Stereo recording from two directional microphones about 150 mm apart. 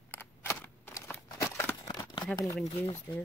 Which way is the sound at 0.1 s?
15° left (ahead or behind).